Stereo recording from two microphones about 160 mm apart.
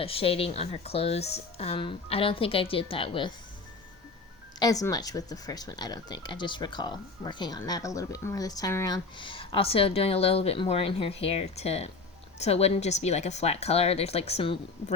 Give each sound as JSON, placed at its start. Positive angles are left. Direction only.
{"t": 0.0, "sound": "speech", "side_deg": 35}
{"t": 4.6, "sound": "speech", "side_deg": 20}
{"t": 9.1, "sound": "speech", "side_deg": 30}